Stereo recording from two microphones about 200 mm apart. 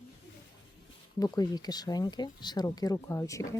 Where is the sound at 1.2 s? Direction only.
20° left (ahead or behind).